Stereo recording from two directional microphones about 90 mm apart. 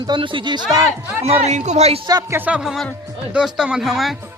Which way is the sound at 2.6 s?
5° right (ahead or behind).